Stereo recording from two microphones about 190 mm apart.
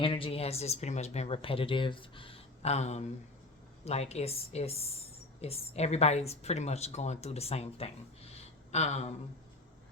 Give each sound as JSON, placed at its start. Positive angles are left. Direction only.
{"t": 0.0, "sound": "speech", "side_deg": 30}